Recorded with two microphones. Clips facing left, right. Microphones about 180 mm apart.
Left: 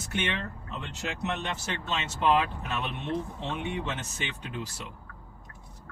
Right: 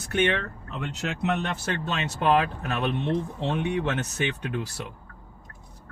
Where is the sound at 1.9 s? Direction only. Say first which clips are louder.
Right 2 dB; 60° right (ahead or behind).